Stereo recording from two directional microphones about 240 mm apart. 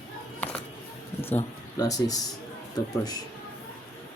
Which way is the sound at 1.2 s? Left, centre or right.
Centre.